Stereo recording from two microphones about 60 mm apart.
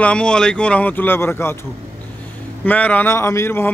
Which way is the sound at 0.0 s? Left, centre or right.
Centre.